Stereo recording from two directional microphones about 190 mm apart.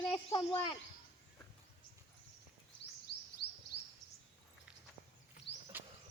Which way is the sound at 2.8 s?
65° left (ahead or behind).